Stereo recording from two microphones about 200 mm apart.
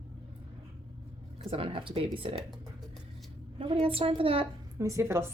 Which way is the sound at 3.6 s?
25° right (ahead or behind).